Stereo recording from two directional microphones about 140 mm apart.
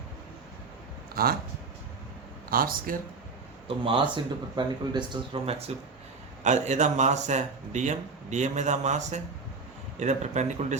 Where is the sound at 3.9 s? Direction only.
35° right (ahead or behind).